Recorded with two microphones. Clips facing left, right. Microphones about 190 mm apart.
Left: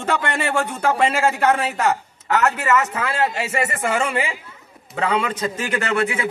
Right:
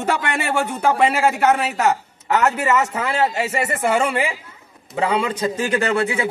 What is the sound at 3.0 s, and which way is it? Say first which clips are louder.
Speech: right 2 dB; 20° right (ahead or behind).